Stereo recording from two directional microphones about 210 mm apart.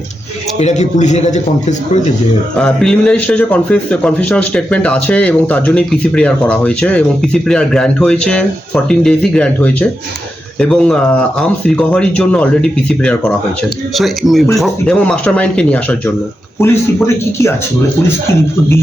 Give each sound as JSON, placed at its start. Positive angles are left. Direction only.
{"t": 0.6, "sound": "a man's voice", "side_deg": 35}
{"t": 2.6, "sound": "a man's voice", "side_deg": 5}